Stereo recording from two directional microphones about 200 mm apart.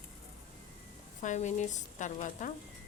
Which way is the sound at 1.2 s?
35° left (ahead or behind).